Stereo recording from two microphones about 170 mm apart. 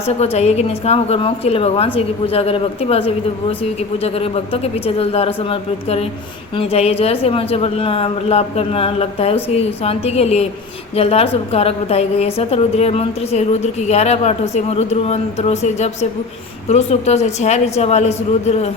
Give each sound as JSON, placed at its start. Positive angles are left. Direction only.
{"t": 0.0, "sound": "a woman's voice", "side_deg": 40}